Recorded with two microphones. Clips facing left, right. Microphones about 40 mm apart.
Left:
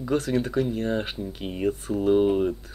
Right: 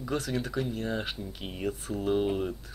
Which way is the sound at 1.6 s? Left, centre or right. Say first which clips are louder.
Left 7 dB; left.